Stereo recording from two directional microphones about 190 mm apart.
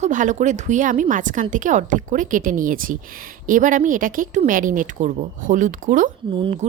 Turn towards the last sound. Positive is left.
turn(degrees=-35)  # may be behind; listen again after turning